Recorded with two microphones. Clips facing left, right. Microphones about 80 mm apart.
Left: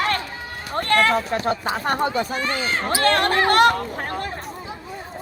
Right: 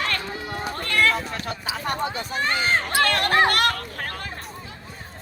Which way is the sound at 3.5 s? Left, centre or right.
Left.